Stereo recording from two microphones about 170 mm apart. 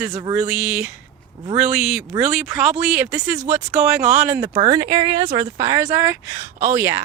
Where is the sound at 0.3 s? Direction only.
5° right (ahead or behind).